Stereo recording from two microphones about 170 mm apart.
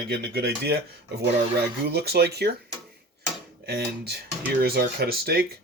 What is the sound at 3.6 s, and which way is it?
Speech, 70° right (ahead or behind).